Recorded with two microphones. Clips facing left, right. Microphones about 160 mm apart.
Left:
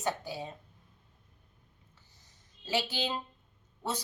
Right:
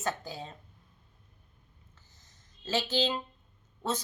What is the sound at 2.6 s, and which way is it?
Speech, 15° left (ahead or behind).